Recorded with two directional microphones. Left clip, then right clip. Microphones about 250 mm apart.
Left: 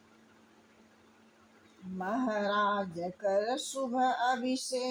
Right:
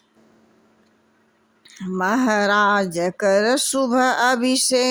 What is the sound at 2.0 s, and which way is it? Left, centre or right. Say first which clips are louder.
Speech: right 13 dB; right.